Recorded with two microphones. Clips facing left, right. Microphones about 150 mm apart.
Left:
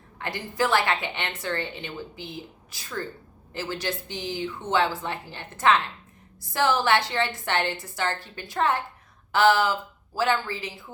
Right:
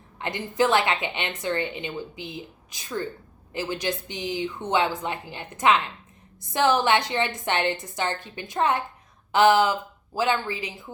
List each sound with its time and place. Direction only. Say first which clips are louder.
0.2 s a woman's voice: right 3 dB; 20° right (ahead or behind)